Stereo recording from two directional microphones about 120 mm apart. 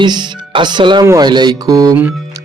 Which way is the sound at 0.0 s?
40° right (ahead or behind).